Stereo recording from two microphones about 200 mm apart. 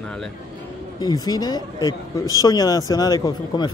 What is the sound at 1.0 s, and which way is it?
Speech, 20° left (ahead or behind).